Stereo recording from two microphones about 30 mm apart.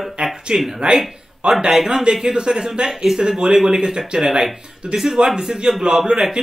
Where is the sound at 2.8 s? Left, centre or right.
Centre.